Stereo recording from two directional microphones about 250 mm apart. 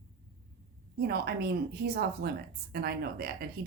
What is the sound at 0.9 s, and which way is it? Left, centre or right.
A woman's voice, right.